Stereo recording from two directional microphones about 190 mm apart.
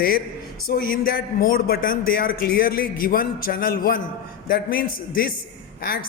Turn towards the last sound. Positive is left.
turn(degrees=50)  # may be behind; listen again after turning